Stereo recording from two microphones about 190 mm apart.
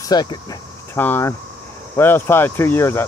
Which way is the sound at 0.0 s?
20° left (ahead or behind).